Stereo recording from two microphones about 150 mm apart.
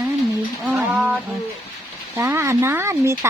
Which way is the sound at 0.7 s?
5° right (ahead or behind).